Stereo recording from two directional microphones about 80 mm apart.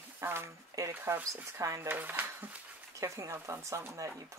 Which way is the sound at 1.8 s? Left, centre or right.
Right.